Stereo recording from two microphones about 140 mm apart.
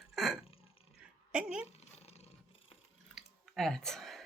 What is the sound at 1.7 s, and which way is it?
Dog, 50° left (ahead or behind).